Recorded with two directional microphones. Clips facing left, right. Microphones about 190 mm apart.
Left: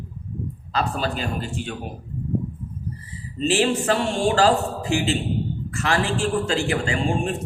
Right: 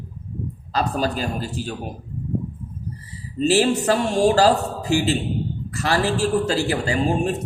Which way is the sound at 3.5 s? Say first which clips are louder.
Right 2 dB; 40° right (ahead or behind).